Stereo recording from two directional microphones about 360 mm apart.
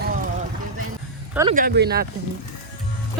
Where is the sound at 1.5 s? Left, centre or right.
Right.